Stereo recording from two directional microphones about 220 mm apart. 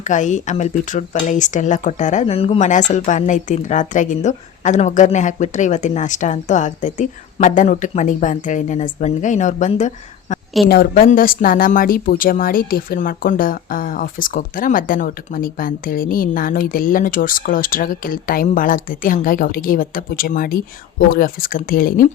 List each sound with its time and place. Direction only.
0.0 s speech: 35° left (ahead or behind)